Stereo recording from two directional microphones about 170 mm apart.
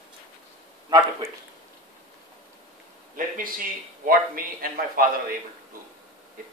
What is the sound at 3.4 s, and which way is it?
A man's voice, 55° right (ahead or behind).